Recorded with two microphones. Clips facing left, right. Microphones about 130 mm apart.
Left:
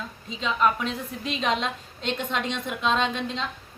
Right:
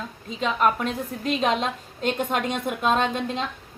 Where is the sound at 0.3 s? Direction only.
50° right (ahead or behind).